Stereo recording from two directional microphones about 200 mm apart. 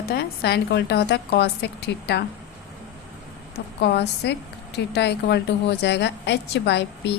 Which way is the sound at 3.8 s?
55° left (ahead or behind).